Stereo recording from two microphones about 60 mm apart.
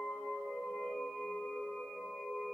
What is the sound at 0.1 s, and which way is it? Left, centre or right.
Singing bowl, centre.